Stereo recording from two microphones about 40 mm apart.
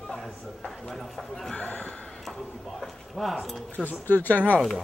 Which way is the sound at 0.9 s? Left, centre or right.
Centre.